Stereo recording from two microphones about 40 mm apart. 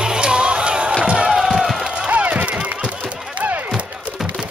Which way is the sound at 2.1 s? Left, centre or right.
Right.